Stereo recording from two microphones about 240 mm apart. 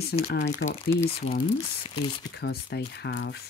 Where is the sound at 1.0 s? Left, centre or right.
Left.